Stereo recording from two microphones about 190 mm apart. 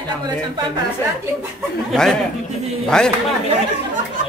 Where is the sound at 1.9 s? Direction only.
5° left (ahead or behind).